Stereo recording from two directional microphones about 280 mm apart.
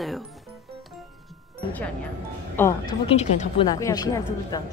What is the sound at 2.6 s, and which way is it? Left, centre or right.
A woman's voice, centre.